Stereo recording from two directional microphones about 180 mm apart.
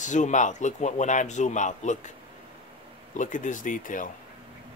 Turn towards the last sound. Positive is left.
turn(degrees=45)  # may be behind; listen again after turning